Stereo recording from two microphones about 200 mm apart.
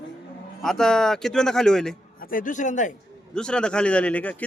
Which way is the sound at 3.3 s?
5° left (ahead or behind).